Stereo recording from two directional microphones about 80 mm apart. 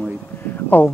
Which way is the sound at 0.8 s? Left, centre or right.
Left.